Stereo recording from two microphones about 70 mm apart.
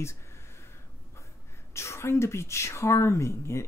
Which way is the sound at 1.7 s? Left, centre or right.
Left.